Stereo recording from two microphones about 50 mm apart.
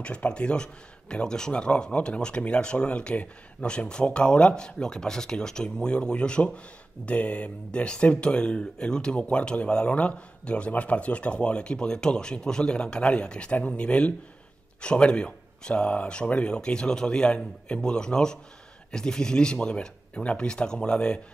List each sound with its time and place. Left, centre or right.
0.0 s speech: left